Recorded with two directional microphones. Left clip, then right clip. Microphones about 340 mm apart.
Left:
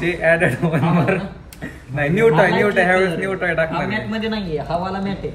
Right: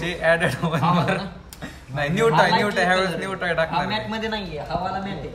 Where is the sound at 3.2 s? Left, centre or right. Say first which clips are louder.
Left 4 dB; centre.